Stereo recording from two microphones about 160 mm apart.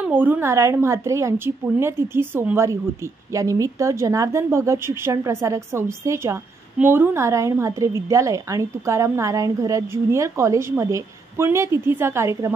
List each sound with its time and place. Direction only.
0.0 s a woman's voice: 10° right (ahead or behind)